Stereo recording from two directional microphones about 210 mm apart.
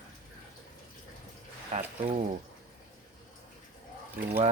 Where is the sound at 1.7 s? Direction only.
30° right (ahead or behind).